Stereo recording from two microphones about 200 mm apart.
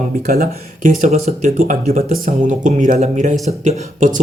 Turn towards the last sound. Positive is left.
turn(degrees=-40)  # may be behind; listen again after turning